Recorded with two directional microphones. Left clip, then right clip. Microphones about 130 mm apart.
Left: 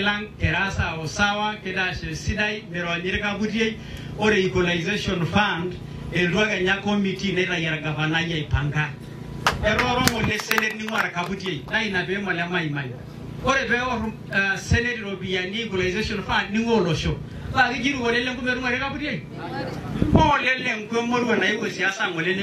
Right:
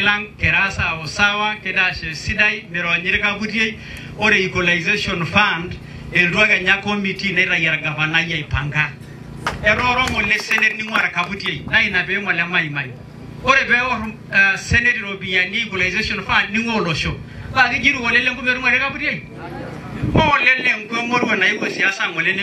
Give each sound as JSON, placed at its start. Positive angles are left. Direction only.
{"t": 0.0, "sound": "speech", "side_deg": -25}
{"t": 9.5, "sound": "music", "side_deg": 45}
{"t": 9.8, "sound": "speech", "side_deg": -25}
{"t": 20.2, "sound": "speech", "side_deg": -25}